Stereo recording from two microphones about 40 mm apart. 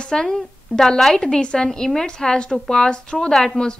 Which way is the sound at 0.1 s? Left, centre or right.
Centre.